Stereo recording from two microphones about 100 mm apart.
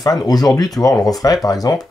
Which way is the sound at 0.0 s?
40° left (ahead or behind).